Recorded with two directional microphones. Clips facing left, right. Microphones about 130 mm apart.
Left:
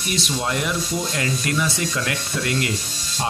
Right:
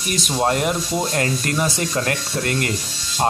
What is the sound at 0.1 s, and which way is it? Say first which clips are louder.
Speech: right 5 dB; 45° right (ahead or behind).